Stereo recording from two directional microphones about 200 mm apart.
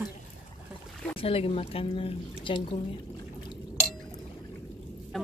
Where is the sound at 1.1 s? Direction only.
30° left (ahead or behind).